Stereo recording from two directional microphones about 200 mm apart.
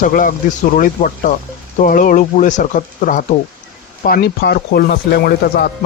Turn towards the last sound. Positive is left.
turn(degrees=50)  # may be behind; listen again after turning